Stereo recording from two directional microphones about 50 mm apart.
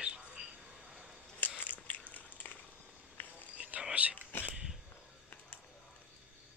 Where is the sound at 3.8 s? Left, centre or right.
Right.